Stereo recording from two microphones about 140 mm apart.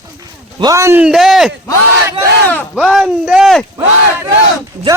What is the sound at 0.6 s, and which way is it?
Speech, 25° right (ahead or behind).